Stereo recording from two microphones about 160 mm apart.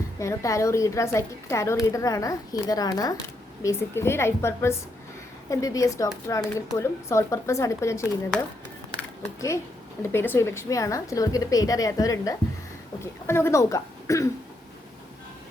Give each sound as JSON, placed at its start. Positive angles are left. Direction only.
{"t": 0.2, "sound": "a woman's voice", "side_deg": 20}
{"t": 10.0, "sound": "a woman's voice", "side_deg": 15}